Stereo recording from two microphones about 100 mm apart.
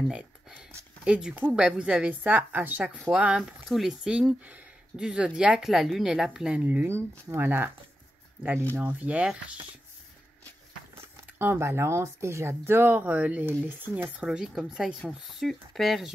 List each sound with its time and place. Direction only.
1.0 s a woman's voice: 10° right (ahead or behind)
8.7 s a woman's voice: 15° right (ahead or behind)
11.0 s speech: 20° right (ahead or behind)
14.1 s speech: 5° right (ahead or behind)